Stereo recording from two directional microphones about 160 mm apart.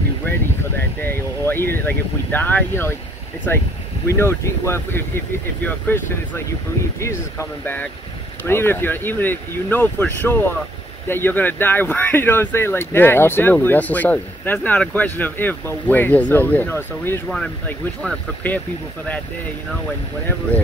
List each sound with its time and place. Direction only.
0.7 s speech: 15° left (ahead or behind)